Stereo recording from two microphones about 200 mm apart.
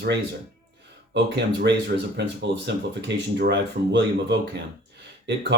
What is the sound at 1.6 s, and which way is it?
Speech, 60° right (ahead or behind).